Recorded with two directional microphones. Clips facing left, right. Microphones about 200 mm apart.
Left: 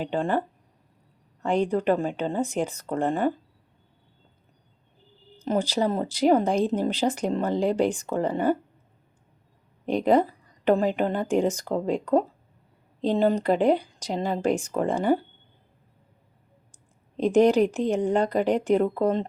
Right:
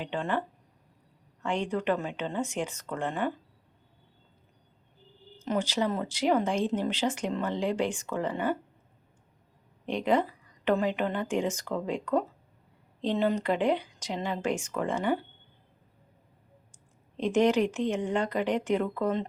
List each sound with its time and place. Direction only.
0.0 s speech: 40° left (ahead or behind)
5.4 s speech: 35° left (ahead or behind)
9.8 s speech: 40° left (ahead or behind)
17.2 s speech: 35° left (ahead or behind)